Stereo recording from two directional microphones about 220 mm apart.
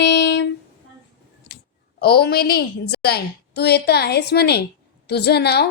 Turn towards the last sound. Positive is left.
turn(degrees=50)  # may be behind; listen again after turning